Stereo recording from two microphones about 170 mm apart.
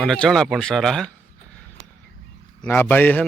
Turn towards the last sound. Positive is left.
turn(degrees=10)  # may be behind; listen again after turning